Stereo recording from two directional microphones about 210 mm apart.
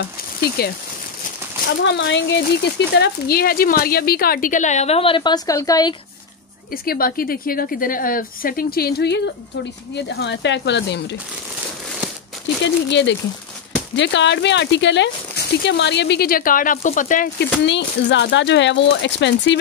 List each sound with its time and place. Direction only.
0.6 s speech: 50° left (ahead or behind)
1.8 s speech: 60° left (ahead or behind); by 5.9 s 15° left (ahead or behind)
6.7 s speech: 45° left (ahead or behind)
12.6 s speech: 55° left (ahead or behind); by 17.5 s 40° left (ahead or behind)
17.6 s speech: 55° left (ahead or behind)